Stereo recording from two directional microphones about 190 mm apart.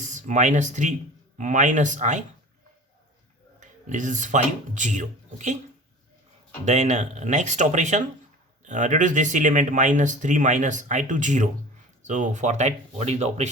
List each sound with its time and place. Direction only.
0.1 s speech: 40° right (ahead or behind)
3.6 s speech: 40° right (ahead or behind)
6.7 s speech: 35° right (ahead or behind)